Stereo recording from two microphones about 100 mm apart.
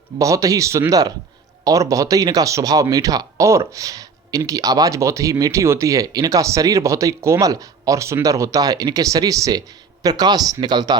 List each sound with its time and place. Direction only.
0.2 s speech: 35° right (ahead or behind)